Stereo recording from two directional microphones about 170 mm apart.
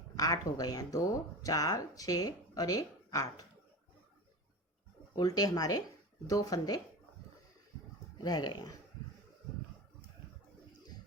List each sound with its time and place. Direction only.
0.2 s speech: 20° left (ahead or behind)
5.1 s speech: 20° left (ahead or behind)
8.2 s speech: 25° left (ahead or behind)